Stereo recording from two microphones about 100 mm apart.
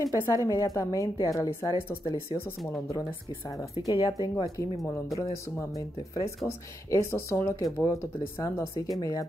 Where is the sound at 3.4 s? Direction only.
30° left (ahead or behind).